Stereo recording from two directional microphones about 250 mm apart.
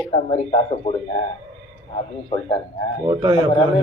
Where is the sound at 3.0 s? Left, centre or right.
Centre.